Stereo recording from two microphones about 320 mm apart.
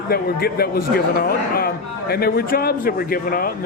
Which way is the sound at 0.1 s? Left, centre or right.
Left.